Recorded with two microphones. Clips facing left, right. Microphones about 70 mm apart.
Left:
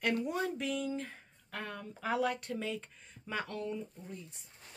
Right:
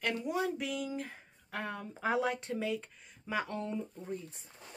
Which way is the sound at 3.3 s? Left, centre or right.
Centre.